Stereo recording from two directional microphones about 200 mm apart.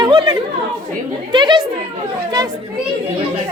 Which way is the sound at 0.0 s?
20° right (ahead or behind).